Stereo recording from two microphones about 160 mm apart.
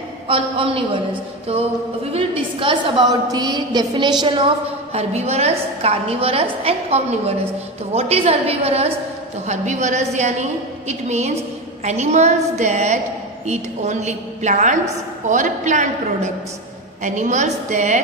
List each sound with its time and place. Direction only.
0.3 s a woman's voice: 35° right (ahead or behind)
2.1 s a woman's voice: 30° right (ahead or behind)
4.9 s a woman's voice: 40° right (ahead or behind)
17.0 s a woman's voice: 50° right (ahead or behind)